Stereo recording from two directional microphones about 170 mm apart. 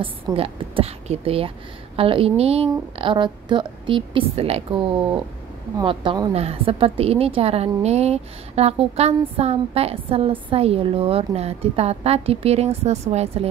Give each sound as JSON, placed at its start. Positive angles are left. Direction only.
{"t": 0.0, "sound": "a woman's voice", "side_deg": -30}
{"t": 6.3, "sound": "a woman's voice", "side_deg": -35}